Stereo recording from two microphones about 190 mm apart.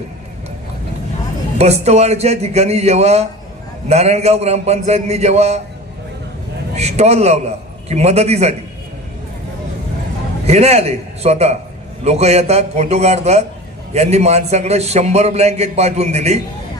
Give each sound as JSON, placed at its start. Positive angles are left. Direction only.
{"t": 1.5, "sound": "a man's voice", "side_deg": -35}
{"t": 6.7, "sound": "a man's voice", "side_deg": -35}
{"t": 10.4, "sound": "a man's voice", "side_deg": -35}